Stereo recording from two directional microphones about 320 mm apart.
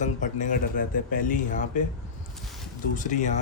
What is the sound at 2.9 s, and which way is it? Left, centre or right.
Speech, left.